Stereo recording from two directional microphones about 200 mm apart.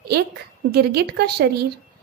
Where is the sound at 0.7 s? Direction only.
55° right (ahead or behind).